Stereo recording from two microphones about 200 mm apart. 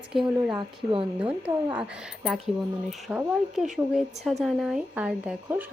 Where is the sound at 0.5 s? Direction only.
25° right (ahead or behind).